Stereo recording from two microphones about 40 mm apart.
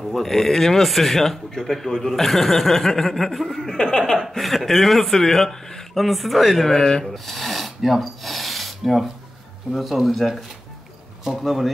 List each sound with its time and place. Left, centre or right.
0.1 s speech: centre
3.7 s speech: centre
4.2 s speech: centre
6.7 s speech: centre
7.1 s a sound: centre
9.7 s speech: centre